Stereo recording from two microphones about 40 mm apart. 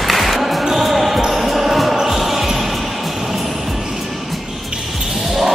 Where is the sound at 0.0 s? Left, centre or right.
Centre.